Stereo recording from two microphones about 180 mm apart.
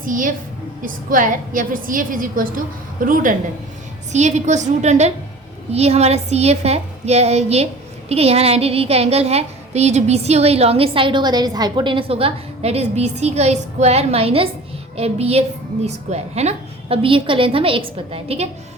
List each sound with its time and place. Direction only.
0.0 s a woman's voice: 50° right (ahead or behind); by 18.4 s 30° right (ahead or behind)